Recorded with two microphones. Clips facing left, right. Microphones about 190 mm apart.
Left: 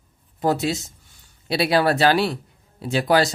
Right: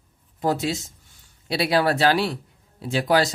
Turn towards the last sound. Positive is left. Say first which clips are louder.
# left 2 dB
turn(degrees=65)  # may be behind; listen again after turning